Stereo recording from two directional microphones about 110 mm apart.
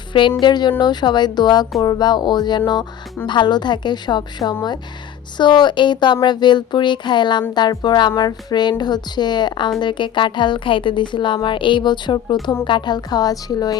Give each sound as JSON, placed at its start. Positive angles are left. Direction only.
{"t": 0.1, "sound": "a woman's voice", "side_deg": 50}